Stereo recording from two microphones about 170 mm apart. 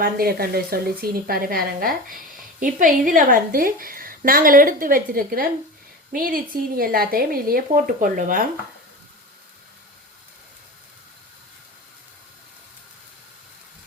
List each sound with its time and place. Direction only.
0.0 s a woman's voice: 65° right (ahead or behind)